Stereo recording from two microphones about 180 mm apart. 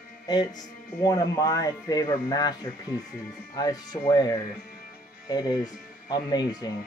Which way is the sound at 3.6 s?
20° left (ahead or behind).